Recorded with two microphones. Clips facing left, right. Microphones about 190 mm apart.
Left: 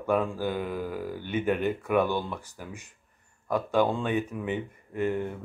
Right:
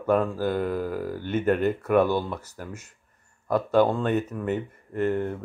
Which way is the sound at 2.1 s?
40° right (ahead or behind).